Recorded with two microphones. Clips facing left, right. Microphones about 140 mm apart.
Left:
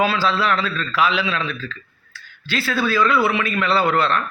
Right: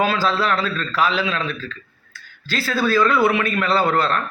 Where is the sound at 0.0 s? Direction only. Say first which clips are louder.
Even; 45° right (ahead or behind).